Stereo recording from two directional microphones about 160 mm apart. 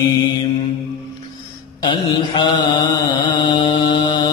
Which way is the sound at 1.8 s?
30° left (ahead or behind).